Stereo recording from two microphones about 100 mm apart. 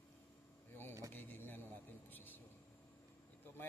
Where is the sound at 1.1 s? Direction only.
20° left (ahead or behind).